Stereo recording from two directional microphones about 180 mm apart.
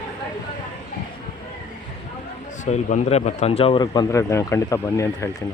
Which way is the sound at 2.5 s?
40° left (ahead or behind).